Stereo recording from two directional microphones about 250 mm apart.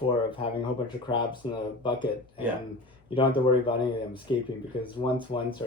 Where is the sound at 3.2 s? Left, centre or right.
Left.